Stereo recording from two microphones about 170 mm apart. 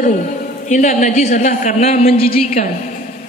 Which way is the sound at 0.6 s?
45° left (ahead or behind).